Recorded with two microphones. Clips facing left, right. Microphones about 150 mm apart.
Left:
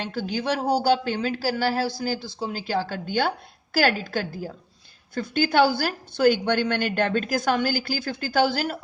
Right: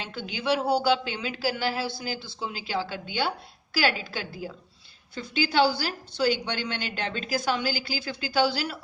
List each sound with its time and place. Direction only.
0.0 s speech: 40° left (ahead or behind)